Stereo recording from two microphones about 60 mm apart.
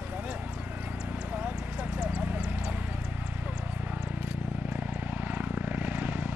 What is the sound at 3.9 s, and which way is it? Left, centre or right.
Vehicle, right.